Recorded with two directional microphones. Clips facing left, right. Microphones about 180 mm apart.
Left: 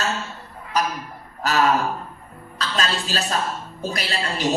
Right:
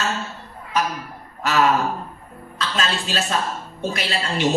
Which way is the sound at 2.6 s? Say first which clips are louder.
Even; 40° left (ahead or behind).